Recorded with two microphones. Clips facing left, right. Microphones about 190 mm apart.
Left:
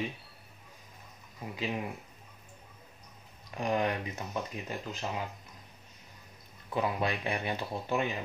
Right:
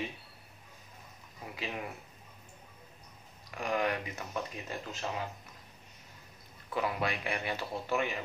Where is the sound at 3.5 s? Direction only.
25° left (ahead or behind).